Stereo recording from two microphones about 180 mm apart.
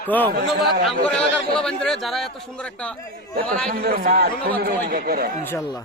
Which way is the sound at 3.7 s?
55° right (ahead or behind).